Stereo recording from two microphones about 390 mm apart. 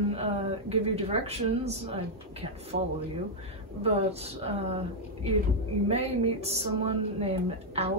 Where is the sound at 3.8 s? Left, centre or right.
Centre.